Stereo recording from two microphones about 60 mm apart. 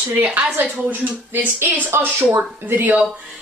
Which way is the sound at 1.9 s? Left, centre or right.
Right.